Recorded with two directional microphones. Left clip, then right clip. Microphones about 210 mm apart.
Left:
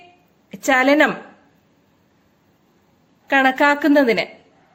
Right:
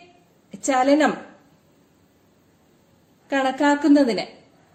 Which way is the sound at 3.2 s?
40° left (ahead or behind).